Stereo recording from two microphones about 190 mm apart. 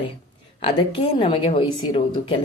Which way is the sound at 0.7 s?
30° left (ahead or behind).